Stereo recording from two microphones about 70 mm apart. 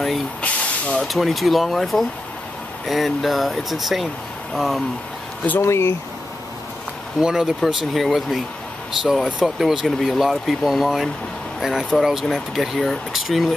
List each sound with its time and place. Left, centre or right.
0.4 s hiss: centre
1.0 s speech: centre
5.6 s speech: left
7.2 s speech: centre
7.6 s speech: centre